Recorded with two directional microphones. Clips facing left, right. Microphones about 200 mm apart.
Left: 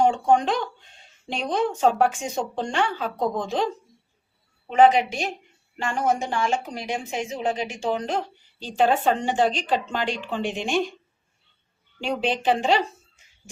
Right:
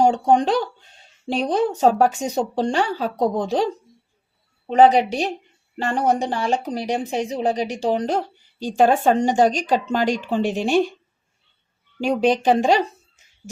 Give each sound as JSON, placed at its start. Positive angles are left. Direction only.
{"t": 0.0, "sound": "speech", "side_deg": -35}
{"t": 11.9, "sound": "speech", "side_deg": -40}